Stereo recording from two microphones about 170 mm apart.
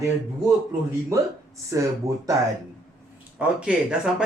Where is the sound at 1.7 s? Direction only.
15° right (ahead or behind).